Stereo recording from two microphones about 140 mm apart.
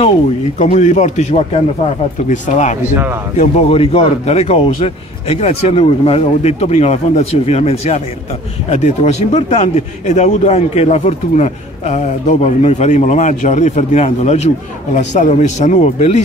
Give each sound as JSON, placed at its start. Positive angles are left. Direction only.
{"t": 0.6, "sound": "a man's voice", "side_deg": 60}
{"t": 3.3, "sound": "a man's voice", "side_deg": 45}